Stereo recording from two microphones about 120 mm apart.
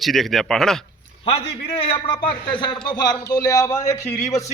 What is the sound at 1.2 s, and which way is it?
A man's voice, 55° left (ahead or behind).